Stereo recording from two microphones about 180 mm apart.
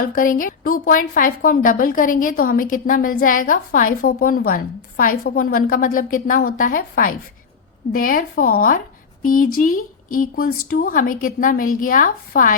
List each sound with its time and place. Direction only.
0.0 s a woman's voice: 50° left (ahead or behind)